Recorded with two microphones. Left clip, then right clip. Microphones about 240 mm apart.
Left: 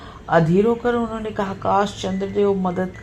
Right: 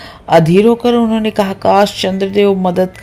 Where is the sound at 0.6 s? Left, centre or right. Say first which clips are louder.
Right 8 dB; right.